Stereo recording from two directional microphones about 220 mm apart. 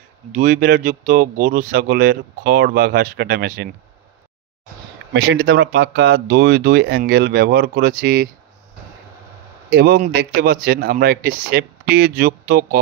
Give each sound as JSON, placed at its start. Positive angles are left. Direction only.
{"t": 0.3, "sound": "speech", "side_deg": -40}
{"t": 5.1, "sound": "speech", "side_deg": -50}
{"t": 9.7, "sound": "speech", "side_deg": -45}